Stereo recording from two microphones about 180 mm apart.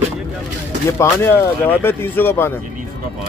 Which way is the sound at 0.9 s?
15° left (ahead or behind).